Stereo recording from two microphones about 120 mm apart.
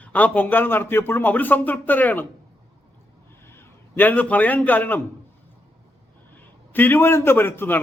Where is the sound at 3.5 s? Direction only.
15° left (ahead or behind).